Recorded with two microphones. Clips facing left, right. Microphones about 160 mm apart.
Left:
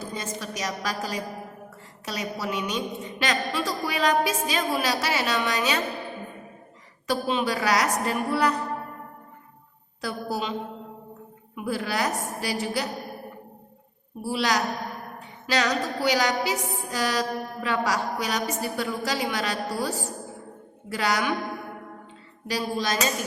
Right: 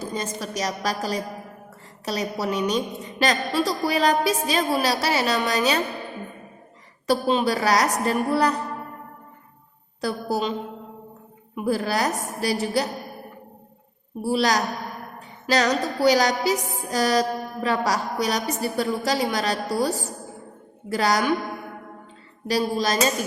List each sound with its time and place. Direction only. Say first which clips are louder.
0.1 s music: right 4 dB; 40° right (ahead or behind)
7.1 s music: right 4 dB; 35° right (ahead or behind)
10.0 s music: right 5 dB; 40° right (ahead or behind)
11.5 s music: right 4 dB; 40° right (ahead or behind)
14.2 s music: right 4 dB; 40° right (ahead or behind)
20.9 s music: right 4 dB; 40° right (ahead or behind)
22.4 s music: right 5 dB; 40° right (ahead or behind)